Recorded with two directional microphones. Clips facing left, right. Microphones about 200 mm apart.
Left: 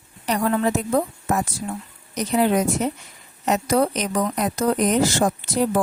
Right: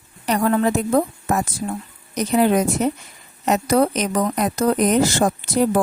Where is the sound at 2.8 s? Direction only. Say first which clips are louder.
Right 4 dB; 50° right (ahead or behind).